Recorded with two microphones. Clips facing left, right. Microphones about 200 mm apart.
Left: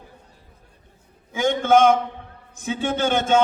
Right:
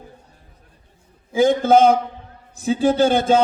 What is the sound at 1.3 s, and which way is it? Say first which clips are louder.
A man's voice: right 4 dB; 35° right (ahead or behind).